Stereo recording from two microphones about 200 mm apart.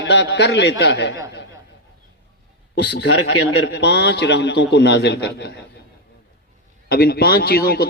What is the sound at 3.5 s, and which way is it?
A man's voice, 60° left (ahead or behind).